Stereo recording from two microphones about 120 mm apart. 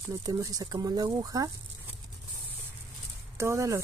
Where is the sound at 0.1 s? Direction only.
30° right (ahead or behind).